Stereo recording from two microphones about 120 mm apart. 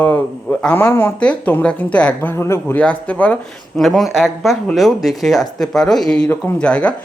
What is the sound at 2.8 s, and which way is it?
Speech, 10° left (ahead or behind).